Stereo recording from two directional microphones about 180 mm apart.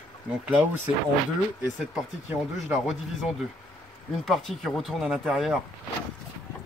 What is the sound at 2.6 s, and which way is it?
Speech, centre (ahead or behind).